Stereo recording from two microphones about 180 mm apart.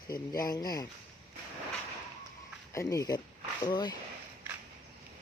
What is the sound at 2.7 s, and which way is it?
Speech, 20° left (ahead or behind).